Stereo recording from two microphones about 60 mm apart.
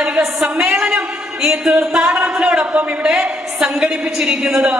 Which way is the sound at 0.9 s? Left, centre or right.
Centre.